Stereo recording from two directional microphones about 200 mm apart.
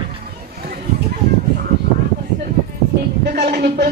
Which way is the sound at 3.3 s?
55° right (ahead or behind).